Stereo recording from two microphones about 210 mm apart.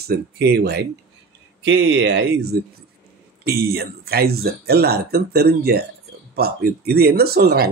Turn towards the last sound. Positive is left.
turn(degrees=-50)  # may be behind; listen again after turning